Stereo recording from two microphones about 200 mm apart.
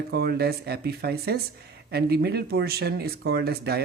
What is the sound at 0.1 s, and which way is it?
Speech, 55° right (ahead or behind).